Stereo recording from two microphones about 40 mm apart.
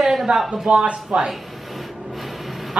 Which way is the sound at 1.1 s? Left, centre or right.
Right.